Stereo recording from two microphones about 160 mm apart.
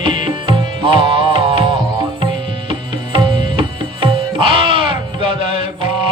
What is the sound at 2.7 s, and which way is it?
Music, 30° right (ahead or behind).